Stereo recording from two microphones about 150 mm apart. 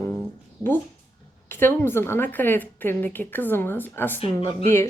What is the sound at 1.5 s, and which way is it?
Speech, 15° left (ahead or behind).